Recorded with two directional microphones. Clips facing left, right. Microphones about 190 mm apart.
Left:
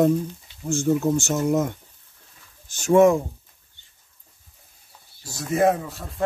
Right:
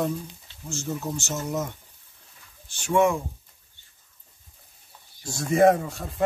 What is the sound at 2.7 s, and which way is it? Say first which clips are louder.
Speech: left 6 dB; 40° left (ahead or behind).